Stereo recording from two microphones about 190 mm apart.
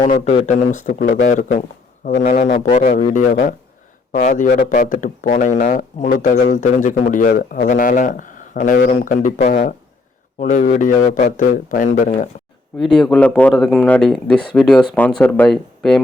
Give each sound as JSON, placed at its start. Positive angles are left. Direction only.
{"t": 0.0, "sound": "speech", "side_deg": 35}
{"t": 12.8, "sound": "speech", "side_deg": 5}